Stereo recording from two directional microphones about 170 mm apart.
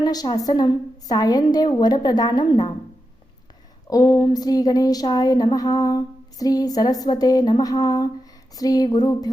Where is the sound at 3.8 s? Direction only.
25° left (ahead or behind).